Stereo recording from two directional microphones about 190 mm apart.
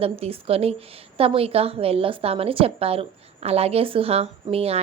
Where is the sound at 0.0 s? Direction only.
30° right (ahead or behind).